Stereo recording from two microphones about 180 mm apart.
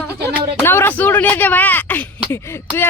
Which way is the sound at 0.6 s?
10° left (ahead or behind).